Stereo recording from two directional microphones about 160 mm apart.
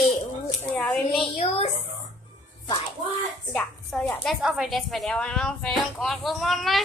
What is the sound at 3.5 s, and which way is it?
Speech, centre (ahead or behind).